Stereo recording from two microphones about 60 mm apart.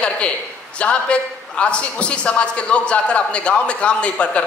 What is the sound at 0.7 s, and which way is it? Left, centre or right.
A man's voice, centre.